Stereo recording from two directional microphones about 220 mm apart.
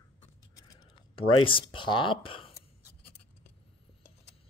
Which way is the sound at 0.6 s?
15° left (ahead or behind).